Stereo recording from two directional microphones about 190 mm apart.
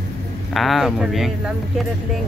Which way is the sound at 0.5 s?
Centre (ahead or behind).